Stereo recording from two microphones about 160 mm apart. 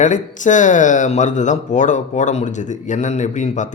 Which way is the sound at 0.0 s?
50° left (ahead or behind).